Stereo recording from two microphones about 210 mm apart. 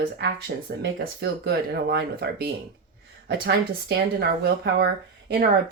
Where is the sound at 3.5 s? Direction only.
50° right (ahead or behind).